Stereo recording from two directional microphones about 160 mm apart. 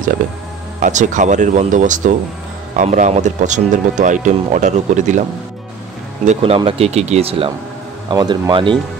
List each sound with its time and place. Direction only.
0.7 s speech: 50° right (ahead or behind)
6.2 s speech: 35° right (ahead or behind)